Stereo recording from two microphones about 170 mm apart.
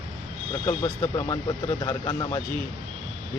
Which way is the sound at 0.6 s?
15° left (ahead or behind).